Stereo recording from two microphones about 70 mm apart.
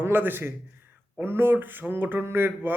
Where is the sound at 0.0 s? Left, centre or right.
Right.